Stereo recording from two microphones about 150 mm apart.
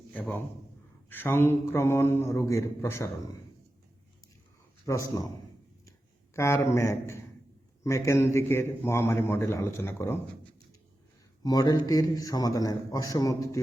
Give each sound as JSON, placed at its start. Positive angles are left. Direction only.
{"t": 0.1, "sound": "a sound", "side_deg": 10}
{"t": 1.1, "sound": "speech", "side_deg": 15}
{"t": 4.9, "sound": "a man's voice", "side_deg": 20}
{"t": 6.3, "sound": "a man's voice", "side_deg": 20}
{"t": 11.4, "sound": "a man's voice", "side_deg": 25}